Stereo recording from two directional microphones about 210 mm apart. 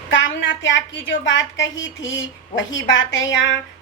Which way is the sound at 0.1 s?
60° left (ahead or behind).